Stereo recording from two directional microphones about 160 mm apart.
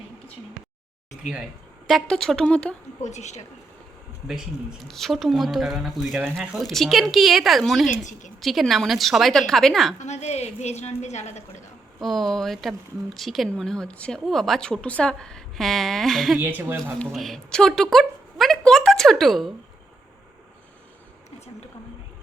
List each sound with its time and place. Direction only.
1.9 s speech: 5° left (ahead or behind)
3.0 s a woman's voice: 45° left (ahead or behind)
4.3 s speech: centre (ahead or behind)
7.9 s a woman's voice: 50° left (ahead or behind)
8.4 s speech: centre (ahead or behind)
10.0 s a woman's voice: 45° left (ahead or behind)
11.9 s speech: centre (ahead or behind)
16.4 s speech: 10° right (ahead or behind)
17.0 s a woman's voice: centre (ahead or behind)